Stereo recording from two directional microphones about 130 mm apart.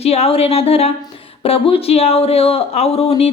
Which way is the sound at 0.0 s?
50° left (ahead or behind).